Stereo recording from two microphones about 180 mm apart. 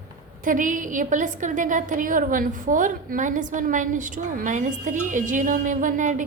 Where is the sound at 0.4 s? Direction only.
45° right (ahead or behind).